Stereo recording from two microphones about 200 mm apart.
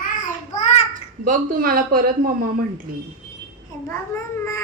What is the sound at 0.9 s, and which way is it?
Speech, 40° right (ahead or behind).